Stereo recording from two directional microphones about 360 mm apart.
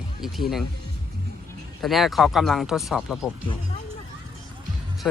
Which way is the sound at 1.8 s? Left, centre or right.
Centre.